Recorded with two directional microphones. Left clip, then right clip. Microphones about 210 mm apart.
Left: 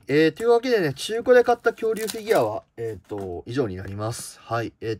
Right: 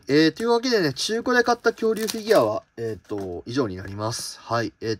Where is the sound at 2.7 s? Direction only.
45° right (ahead or behind).